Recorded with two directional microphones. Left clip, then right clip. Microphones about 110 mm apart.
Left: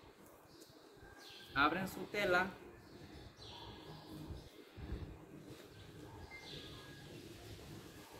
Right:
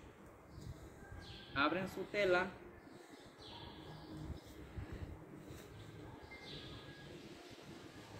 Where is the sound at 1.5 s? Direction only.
55° left (ahead or behind).